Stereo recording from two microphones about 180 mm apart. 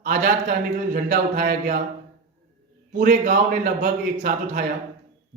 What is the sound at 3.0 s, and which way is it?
Speech, 50° right (ahead or behind).